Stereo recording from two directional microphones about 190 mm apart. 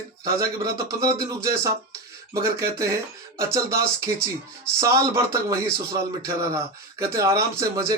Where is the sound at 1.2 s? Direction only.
15° right (ahead or behind).